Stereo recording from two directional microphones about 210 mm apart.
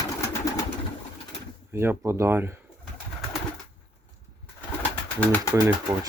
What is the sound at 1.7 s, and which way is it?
Speech, 10° right (ahead or behind).